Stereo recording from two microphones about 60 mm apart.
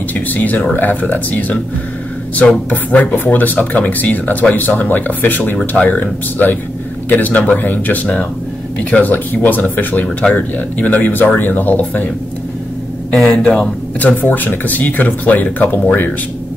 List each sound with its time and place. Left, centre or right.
0.1 s speech: left
2.7 s speech: left
13.1 s speech: centre
13.4 s speech: left